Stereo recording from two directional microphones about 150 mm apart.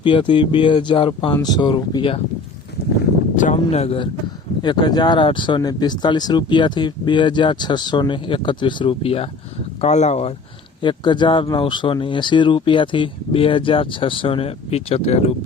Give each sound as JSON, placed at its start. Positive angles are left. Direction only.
{"t": 0.0, "sound": "speech", "side_deg": 35}
{"t": 3.3, "sound": "speech", "side_deg": 50}
{"t": 10.8, "sound": "speech", "side_deg": 30}